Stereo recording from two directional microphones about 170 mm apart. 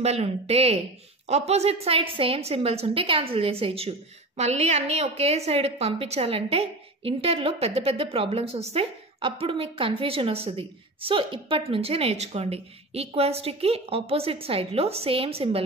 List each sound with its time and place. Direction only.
0.0 s a woman's voice: 40° right (ahead or behind)